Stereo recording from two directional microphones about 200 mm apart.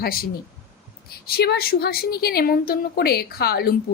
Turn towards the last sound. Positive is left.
turn(degrees=50)  # may be behind; listen again after turning